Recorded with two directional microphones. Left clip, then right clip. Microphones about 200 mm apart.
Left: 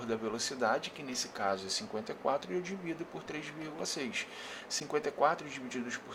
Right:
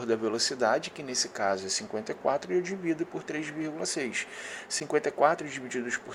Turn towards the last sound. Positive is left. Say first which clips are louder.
# right 7 dB
turn(degrees=-20)  # may be behind; listen again after turning